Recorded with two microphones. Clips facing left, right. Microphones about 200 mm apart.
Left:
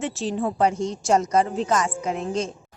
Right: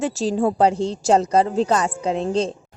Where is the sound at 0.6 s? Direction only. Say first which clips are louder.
Right 1 dB; 30° right (ahead or behind).